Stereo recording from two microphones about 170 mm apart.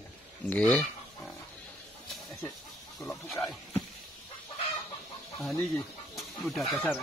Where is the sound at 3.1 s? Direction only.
15° left (ahead or behind).